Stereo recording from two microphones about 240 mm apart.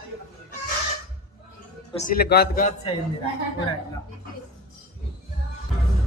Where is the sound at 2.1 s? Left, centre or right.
Left.